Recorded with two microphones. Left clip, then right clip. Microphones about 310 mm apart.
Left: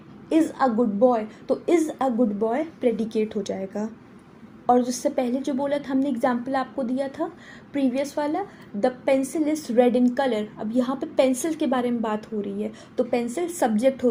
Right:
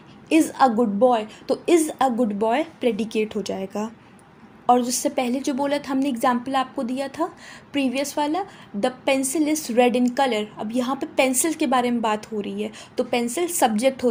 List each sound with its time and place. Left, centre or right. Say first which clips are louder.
0.3 s a woman's voice: right 3 dB; right
4.6 s a woman's voice: right 2 dB; right